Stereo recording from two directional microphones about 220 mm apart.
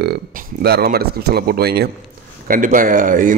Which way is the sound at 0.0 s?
45° right (ahead or behind).